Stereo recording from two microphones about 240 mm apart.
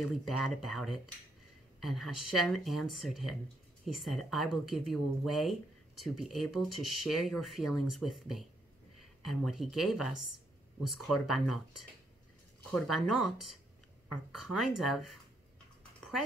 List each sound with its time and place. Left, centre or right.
0.1 s speech: centre